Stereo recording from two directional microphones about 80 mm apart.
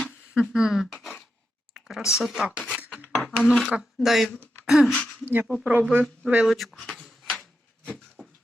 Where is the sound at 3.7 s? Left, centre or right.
Centre.